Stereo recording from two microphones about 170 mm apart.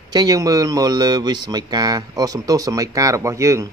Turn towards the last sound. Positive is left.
turn(degrees=-20)  # may be behind; listen again after turning